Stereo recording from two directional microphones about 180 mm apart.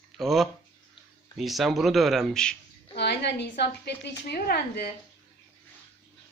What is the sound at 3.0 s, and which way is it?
A woman's voice, 70° left (ahead or behind).